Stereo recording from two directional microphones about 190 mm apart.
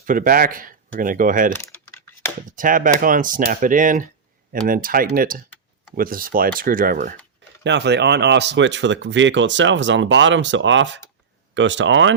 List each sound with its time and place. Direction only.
0.0 s speech: 45° right (ahead or behind)
1.5 s typing: 15° left (ahead or behind)
2.5 s speech: 45° right (ahead or behind)
7.6 s speech: 65° right (ahead or behind)